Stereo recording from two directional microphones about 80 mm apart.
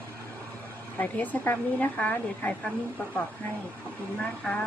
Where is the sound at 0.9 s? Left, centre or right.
Left.